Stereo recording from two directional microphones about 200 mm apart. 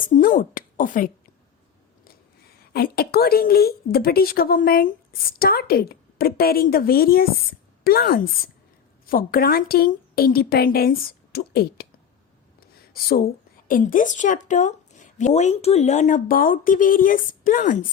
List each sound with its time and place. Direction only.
0.0 s a woman's voice: 40° left (ahead or behind)
2.7 s a woman's voice: 50° left (ahead or behind)
12.5 s a sound: 50° left (ahead or behind)
13.7 s speech: 45° left (ahead or behind)